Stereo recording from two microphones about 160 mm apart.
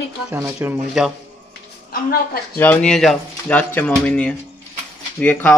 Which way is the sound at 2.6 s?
10° left (ahead or behind).